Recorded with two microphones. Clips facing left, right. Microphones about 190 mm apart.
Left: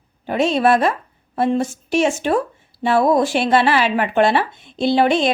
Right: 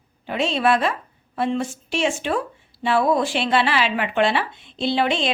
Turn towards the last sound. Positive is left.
turn(degrees=45)  # may be behind; listen again after turning